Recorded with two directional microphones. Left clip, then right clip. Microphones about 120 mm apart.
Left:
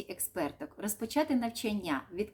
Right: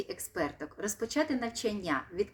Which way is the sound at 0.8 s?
30° left (ahead or behind).